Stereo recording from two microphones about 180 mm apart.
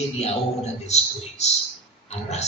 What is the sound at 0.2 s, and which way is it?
A man's voice, 35° left (ahead or behind).